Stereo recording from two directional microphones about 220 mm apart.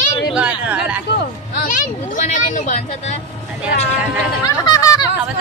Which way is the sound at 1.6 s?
35° left (ahead or behind).